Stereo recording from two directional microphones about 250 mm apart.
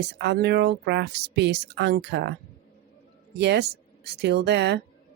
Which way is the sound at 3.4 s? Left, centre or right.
Right.